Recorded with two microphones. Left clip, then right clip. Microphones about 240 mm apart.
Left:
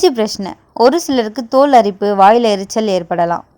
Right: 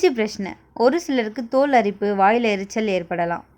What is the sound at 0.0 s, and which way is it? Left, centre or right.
A woman's voice, left.